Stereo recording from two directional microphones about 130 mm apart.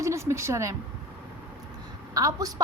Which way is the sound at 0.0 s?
20° right (ahead or behind).